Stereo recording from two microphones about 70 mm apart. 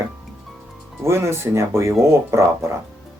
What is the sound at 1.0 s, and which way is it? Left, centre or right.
Speech, right.